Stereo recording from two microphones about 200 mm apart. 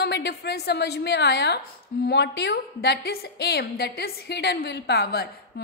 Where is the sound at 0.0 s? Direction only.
55° left (ahead or behind).